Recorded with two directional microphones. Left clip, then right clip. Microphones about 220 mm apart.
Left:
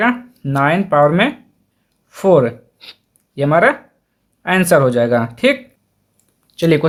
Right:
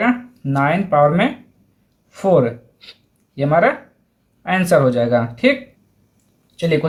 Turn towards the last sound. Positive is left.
turn(degrees=50)  # may be behind; listen again after turning